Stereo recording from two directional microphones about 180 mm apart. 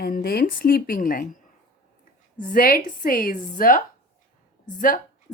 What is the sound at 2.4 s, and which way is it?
Speech, 55° left (ahead or behind).